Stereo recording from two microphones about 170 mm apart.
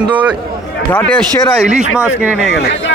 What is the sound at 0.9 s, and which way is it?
Speech, 5° left (ahead or behind).